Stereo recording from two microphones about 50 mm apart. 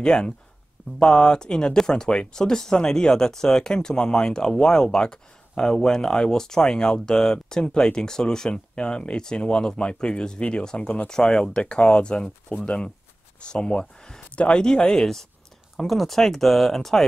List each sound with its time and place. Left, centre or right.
0.0 s speech: centre